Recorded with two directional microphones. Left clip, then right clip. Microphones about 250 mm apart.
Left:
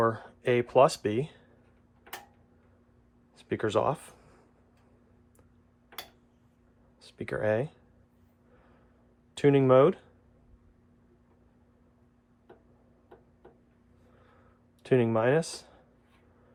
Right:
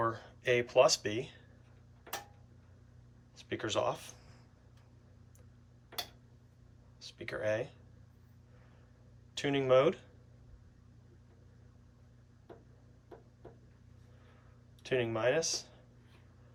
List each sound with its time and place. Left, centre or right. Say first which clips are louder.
0.0 s speech: left 7 dB; centre
3.3 s speech: left 7 dB; centre
7.0 s speech: left 6 dB; centre
9.3 s speech: left 7 dB; centre
14.8 s speech: left 6 dB; centre